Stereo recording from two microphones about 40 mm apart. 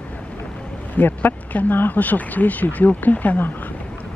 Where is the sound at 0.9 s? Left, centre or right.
Left.